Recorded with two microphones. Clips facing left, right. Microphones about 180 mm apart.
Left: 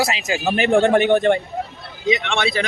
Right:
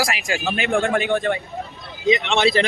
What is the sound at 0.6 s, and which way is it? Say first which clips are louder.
Speech: left 6 dB; 35° left (ahead or behind).